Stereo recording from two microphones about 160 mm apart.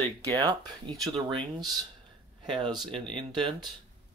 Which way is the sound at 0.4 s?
25° right (ahead or behind).